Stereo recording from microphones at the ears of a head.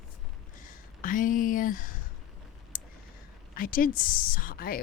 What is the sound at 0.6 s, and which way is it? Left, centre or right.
Speech, left.